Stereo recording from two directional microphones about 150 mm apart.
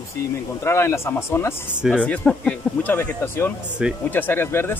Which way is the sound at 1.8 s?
5° right (ahead or behind).